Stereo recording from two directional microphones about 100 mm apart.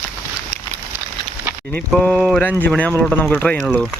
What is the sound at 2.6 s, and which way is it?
Speech, 15° left (ahead or behind).